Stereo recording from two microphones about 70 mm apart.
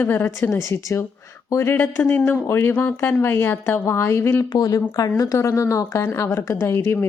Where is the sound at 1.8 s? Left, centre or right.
Left.